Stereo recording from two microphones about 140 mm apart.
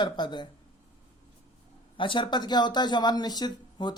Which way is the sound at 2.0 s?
35° left (ahead or behind).